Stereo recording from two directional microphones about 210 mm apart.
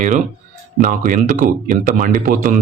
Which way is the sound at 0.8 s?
40° right (ahead or behind).